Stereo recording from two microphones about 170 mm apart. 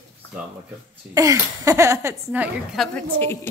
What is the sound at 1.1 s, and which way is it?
Speech, 20° right (ahead or behind).